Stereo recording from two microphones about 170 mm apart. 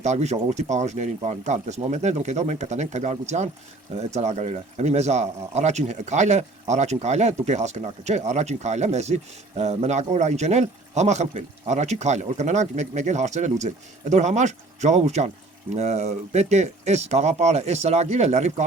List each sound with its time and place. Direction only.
0.0 s speech: 40° right (ahead or behind)